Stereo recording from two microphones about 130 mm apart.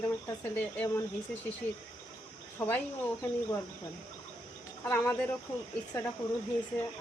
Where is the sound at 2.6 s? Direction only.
10° left (ahead or behind).